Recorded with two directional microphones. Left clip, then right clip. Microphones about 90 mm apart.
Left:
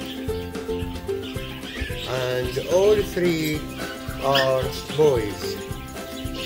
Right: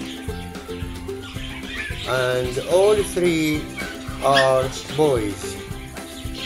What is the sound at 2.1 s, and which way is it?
Music, 30° right (ahead or behind).